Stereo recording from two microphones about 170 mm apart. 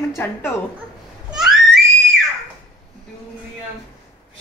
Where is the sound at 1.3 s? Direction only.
Centre (ahead or behind).